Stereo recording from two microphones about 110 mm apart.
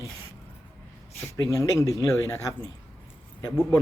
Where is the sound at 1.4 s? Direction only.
30° left (ahead or behind).